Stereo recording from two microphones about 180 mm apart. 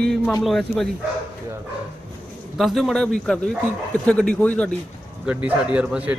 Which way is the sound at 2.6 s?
Centre (ahead or behind).